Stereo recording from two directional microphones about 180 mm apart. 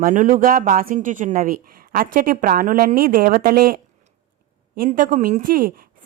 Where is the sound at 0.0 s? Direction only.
45° right (ahead or behind).